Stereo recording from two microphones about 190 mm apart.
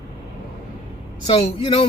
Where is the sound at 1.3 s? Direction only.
30° left (ahead or behind).